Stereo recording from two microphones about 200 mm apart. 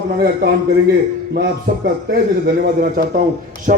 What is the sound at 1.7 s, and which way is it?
A man's voice, 45° right (ahead or behind).